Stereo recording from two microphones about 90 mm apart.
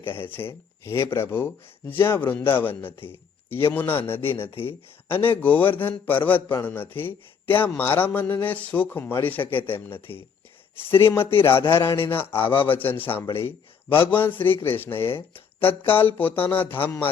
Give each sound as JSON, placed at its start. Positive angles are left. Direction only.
{"t": 0.0, "sound": "a man's voice", "side_deg": 25}
{"t": 4.3, "sound": "speech", "side_deg": 90}
{"t": 5.0, "sound": "a man's voice", "side_deg": 25}
{"t": 11.3, "sound": "a sound", "side_deg": 80}
{"t": 11.6, "sound": "a man's voice", "side_deg": 30}